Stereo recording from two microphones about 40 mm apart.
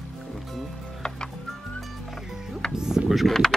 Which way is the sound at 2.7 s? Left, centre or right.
Centre.